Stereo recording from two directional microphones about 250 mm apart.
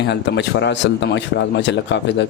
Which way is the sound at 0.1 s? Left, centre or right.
Left.